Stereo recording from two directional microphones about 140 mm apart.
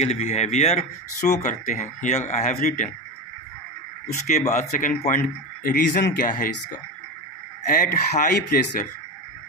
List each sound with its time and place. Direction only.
0.0 s speech: 50° left (ahead or behind)
4.5 s a man's voice: 65° left (ahead or behind)
7.6 s a man's voice: 75° left (ahead or behind)